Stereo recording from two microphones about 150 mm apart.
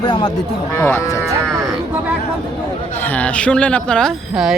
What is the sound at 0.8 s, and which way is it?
Speech, 15° left (ahead or behind).